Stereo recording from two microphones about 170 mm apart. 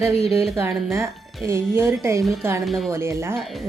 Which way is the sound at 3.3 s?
Centre (ahead or behind).